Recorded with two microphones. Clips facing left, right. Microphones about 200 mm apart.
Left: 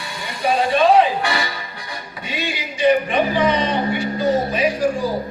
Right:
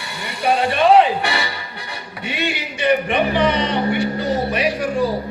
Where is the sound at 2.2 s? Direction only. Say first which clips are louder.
Right 3 dB; 65° right (ahead or behind).